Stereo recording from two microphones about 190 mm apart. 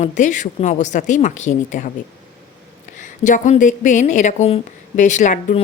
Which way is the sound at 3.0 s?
40° left (ahead or behind).